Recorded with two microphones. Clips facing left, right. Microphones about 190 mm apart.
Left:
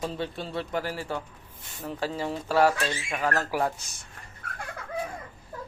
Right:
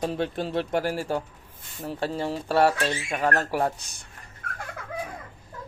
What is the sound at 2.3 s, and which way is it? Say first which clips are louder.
Speech: right 1 dB; 30° right (ahead or behind).